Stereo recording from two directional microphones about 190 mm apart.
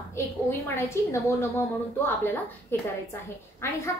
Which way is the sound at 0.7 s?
15° left (ahead or behind).